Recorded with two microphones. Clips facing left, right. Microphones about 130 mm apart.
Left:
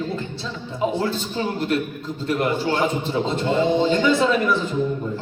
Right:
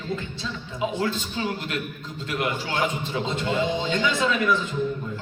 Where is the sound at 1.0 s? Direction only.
35° left (ahead or behind).